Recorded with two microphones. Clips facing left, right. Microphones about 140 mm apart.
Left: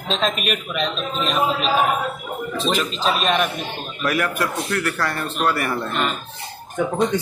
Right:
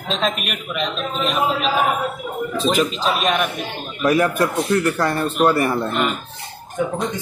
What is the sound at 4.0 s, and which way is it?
Speech, 25° right (ahead or behind).